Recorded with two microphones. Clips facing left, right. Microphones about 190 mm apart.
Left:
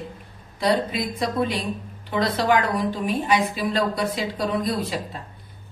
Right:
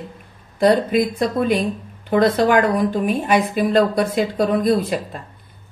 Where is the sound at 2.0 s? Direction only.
50° right (ahead or behind).